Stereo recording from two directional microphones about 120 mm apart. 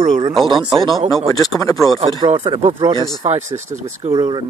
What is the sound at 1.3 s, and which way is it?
Speech, 30° left (ahead or behind).